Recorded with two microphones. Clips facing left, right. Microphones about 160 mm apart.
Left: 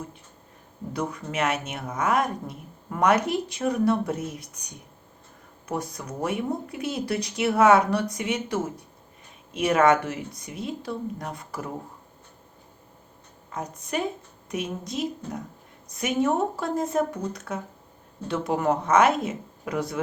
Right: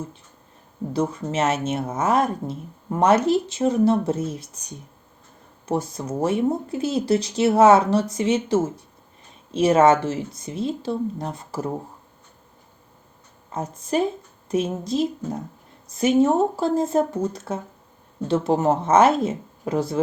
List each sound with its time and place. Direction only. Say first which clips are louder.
0.9 s speech: right 5 dB; 25° right (ahead or behind)
13.5 s speech: right 6 dB; 30° right (ahead or behind)